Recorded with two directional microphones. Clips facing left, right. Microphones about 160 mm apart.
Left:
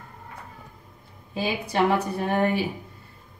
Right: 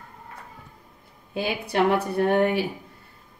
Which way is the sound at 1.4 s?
65° right (ahead or behind).